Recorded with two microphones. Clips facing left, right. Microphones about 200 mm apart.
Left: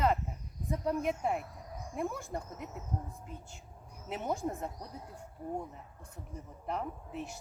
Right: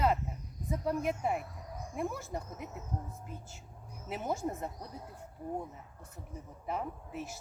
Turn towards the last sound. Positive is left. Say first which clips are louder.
# even
turn(degrees=-5)  # may be behind; listen again after turning